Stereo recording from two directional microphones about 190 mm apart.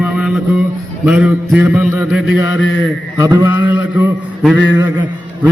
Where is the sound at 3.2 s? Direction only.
20° right (ahead or behind).